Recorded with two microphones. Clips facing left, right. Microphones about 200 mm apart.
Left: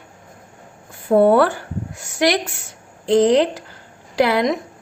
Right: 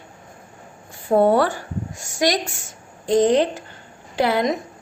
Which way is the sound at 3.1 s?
90° left.